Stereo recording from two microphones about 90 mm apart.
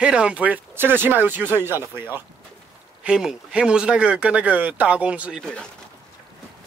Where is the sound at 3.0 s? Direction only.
10° right (ahead or behind).